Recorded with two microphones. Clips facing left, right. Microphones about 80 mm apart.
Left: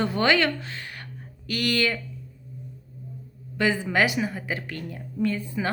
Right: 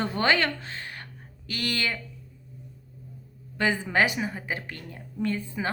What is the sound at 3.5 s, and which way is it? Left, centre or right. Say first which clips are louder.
A woman's voice: left 1 dB; right.